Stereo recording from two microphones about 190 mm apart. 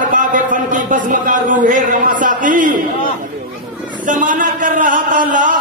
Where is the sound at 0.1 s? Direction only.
45° right (ahead or behind).